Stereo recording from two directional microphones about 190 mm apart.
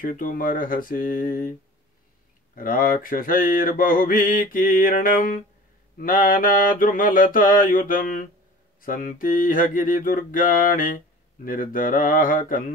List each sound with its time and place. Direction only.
0.0 s mantra: 45° left (ahead or behind)
2.5 s mantra: 45° left (ahead or behind)